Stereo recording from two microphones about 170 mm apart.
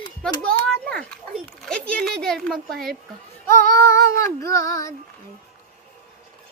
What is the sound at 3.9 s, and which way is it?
Child singing, 15° left (ahead or behind).